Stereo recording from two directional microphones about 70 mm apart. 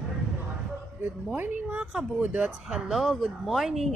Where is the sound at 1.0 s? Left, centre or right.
Right.